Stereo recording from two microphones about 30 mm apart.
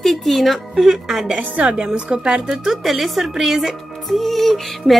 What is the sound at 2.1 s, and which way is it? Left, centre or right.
Speech, right.